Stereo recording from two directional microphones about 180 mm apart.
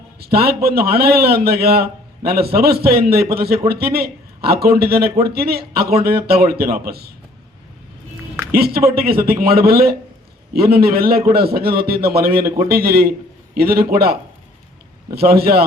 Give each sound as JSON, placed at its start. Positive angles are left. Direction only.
{"t": 0.2, "sound": "a man's voice", "side_deg": -60}
{"t": 8.5, "sound": "a man's voice", "side_deg": -60}